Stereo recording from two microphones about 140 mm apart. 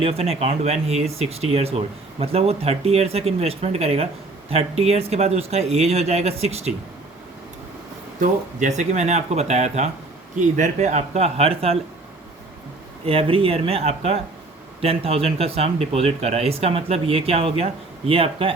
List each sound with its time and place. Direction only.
0.0 s speech: 45° right (ahead or behind)
8.2 s speech: 60° right (ahead or behind); by 11.8 s 45° right (ahead or behind)
13.1 s speech: 40° right (ahead or behind)